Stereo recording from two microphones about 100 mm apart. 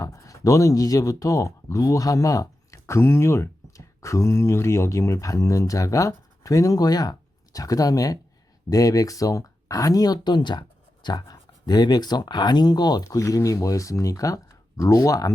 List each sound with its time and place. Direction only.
0.0 s speech: 35° left (ahead or behind)